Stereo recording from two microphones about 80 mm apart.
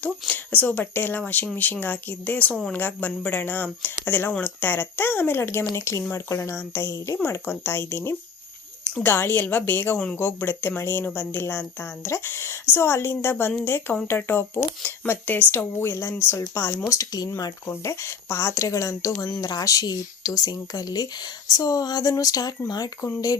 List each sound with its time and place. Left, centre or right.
0.0 s speech: centre
16.9 s speech: left
17.7 s speech: left